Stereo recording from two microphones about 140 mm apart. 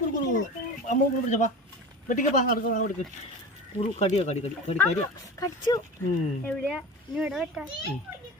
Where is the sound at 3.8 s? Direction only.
50° left (ahead or behind).